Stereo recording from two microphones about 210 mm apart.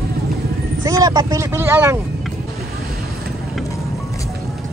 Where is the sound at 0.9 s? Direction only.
15° right (ahead or behind).